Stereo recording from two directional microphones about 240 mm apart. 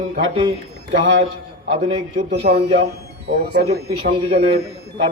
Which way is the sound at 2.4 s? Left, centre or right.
Right.